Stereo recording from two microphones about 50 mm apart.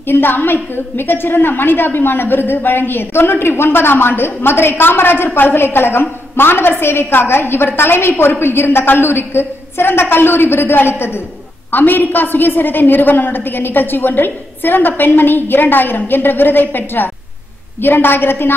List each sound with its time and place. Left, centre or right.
0.0 s a woman's voice: left